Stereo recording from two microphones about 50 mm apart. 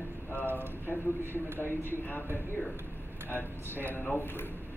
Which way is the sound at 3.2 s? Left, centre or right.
Left.